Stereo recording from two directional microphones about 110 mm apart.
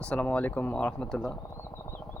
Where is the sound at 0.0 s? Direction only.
10° left (ahead or behind).